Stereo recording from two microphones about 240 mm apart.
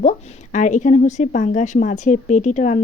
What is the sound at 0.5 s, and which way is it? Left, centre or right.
A woman's voice, left.